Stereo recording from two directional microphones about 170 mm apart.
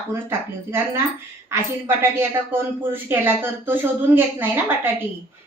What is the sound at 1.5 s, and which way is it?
A woman's voice, 15° right (ahead or behind).